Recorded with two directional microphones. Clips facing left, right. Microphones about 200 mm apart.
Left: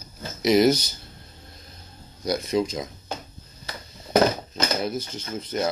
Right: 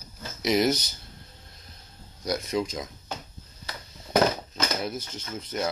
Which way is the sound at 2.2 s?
30° left (ahead or behind).